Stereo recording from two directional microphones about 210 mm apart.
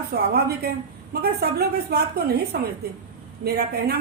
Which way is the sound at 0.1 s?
50° right (ahead or behind).